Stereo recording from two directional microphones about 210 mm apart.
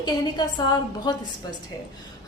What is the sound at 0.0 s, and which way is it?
A woman's voice, 20° left (ahead or behind).